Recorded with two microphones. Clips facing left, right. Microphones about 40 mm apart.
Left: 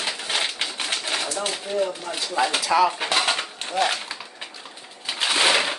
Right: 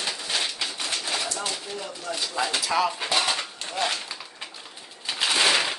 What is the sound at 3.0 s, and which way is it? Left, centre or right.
Coin, left.